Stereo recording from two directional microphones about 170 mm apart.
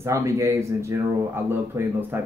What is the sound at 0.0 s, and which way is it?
A man's voice, 15° right (ahead or behind).